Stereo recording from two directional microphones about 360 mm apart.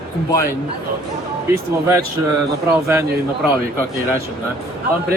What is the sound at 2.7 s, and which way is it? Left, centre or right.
Speech, centre.